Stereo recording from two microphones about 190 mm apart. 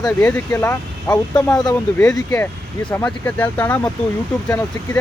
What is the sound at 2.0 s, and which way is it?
Speech, 10° left (ahead or behind).